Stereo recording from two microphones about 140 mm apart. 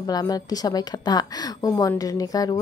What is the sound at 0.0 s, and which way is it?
A woman's voice, 30° left (ahead or behind).